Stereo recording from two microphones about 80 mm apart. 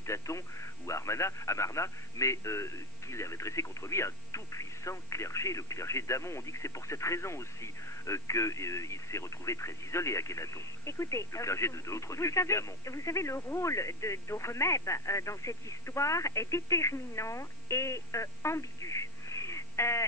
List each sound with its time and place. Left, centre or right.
0.0 s a man's voice: left